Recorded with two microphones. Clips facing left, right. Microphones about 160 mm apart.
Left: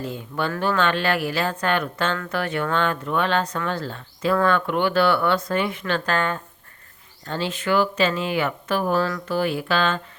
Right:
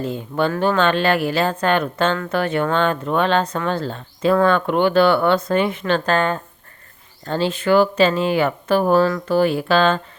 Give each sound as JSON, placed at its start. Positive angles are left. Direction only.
{"t": 0.0, "sound": "speech", "side_deg": -25}